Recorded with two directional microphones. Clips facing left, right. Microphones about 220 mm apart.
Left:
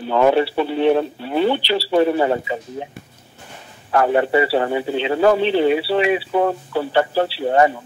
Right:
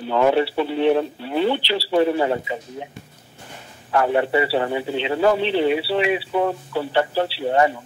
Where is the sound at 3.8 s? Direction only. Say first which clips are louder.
Left 2 dB; 45° left (ahead or behind).